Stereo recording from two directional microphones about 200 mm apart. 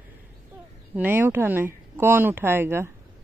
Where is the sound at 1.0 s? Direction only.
10° right (ahead or behind).